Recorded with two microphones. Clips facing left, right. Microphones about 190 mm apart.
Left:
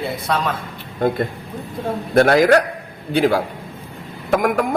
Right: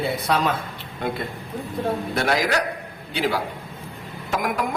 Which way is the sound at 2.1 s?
55° left (ahead or behind).